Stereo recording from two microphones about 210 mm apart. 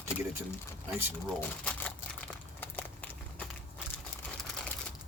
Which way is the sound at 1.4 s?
5° left (ahead or behind).